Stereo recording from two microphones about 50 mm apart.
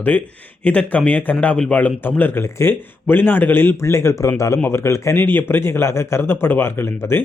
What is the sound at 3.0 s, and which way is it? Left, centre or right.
Speech, left.